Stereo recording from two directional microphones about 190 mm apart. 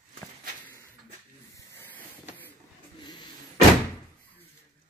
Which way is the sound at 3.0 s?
25° left (ahead or behind).